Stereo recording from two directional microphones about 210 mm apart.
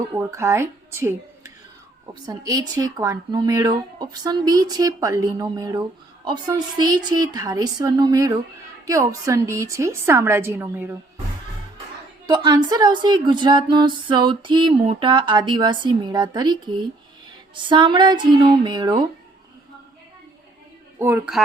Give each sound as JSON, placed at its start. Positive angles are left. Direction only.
{"t": 0.2, "sound": "speech", "side_deg": -15}
{"t": 2.2, "sound": "speech", "side_deg": -15}
{"t": 12.3, "sound": "speech", "side_deg": -20}
{"t": 21.0, "sound": "speech", "side_deg": -5}